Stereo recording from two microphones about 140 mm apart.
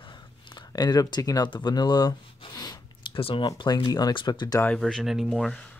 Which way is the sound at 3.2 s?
40° left (ahead or behind).